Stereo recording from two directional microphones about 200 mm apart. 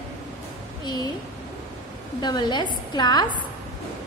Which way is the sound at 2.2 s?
20° left (ahead or behind).